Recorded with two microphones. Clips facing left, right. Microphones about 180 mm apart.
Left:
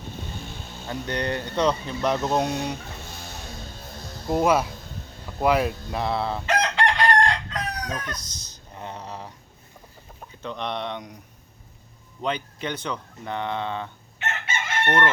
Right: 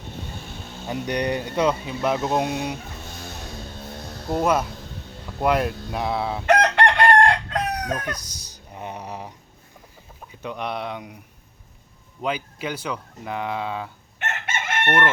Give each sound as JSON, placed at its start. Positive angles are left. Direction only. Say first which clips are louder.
{"t": 0.9, "sound": "speech", "louder": "right 3 dB", "side_deg": -15}
{"t": 4.3, "sound": "speech", "louder": "left 1 dB", "side_deg": 5}
{"t": 6.4, "sound": "chicken", "louder": "right 8 dB", "side_deg": -60}
{"t": 8.1, "sound": "a sound", "louder": "right 1 dB", "side_deg": -10}
{"t": 10.4, "sound": "speech", "louder": "right 1 dB", "side_deg": -10}
{"t": 12.2, "sound": "speech", "louder": "right 1 dB", "side_deg": -5}